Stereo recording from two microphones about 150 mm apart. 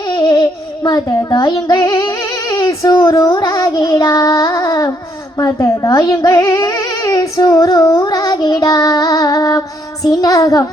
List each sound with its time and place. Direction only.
0.2 s child singing: 25° left (ahead or behind)
5.4 s speech: 20° left (ahead or behind)